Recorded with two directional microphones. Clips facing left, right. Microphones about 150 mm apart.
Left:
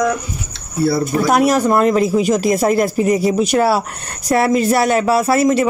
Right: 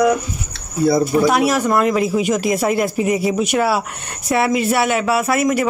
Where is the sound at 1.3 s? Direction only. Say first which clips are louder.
Left 2 dB; 40° left (ahead or behind).